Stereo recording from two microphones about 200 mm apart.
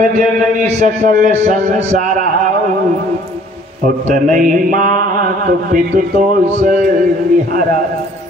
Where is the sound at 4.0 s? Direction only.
40° right (ahead or behind).